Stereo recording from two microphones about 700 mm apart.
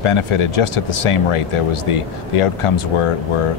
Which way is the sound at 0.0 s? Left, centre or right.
Left.